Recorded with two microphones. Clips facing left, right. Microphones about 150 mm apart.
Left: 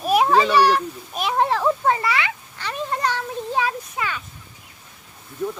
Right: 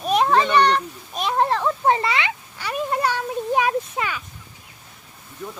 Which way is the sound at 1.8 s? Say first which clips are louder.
Right 1 dB; 25° right (ahead or behind).